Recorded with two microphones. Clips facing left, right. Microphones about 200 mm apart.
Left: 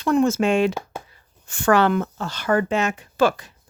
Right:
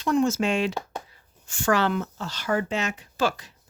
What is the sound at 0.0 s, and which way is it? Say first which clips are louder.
Speech: left 4 dB; 55° left (ahead or behind).